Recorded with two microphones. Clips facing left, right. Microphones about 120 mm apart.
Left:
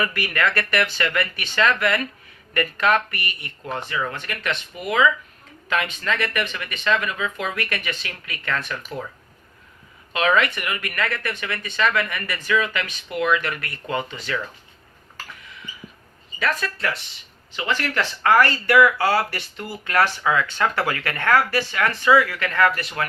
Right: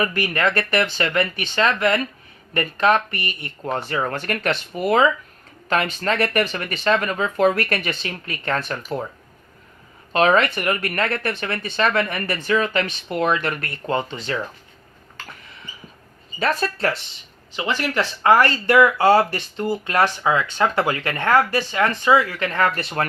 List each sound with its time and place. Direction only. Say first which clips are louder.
0.0 s speech: right 2 dB; 25° right (ahead or behind)
10.1 s speech: right 3 dB; 35° right (ahead or behind)
16.4 s speech: right 4 dB; 30° right (ahead or behind)
17.6 s speech: right 2 dB; 20° right (ahead or behind)